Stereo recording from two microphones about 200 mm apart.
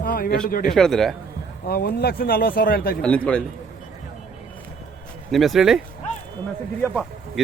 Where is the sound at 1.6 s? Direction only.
50° left (ahead or behind).